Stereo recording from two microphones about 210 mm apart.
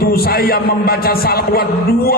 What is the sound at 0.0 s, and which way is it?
A man's voice, 45° left (ahead or behind).